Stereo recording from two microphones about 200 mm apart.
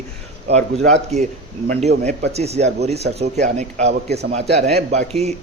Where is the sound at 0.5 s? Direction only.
35° right (ahead or behind).